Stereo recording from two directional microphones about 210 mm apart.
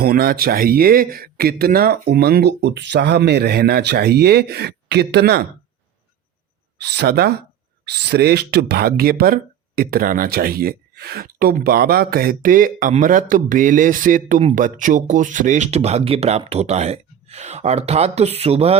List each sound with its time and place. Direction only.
0.0 s speech: 45° right (ahead or behind)
6.8 s speech: 50° right (ahead or behind); by 18.8 s 30° right (ahead or behind)